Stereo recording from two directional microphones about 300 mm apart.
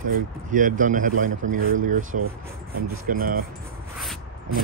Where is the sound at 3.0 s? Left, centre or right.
Right.